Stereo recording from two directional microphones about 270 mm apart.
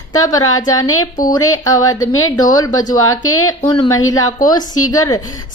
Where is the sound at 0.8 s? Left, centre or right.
Left.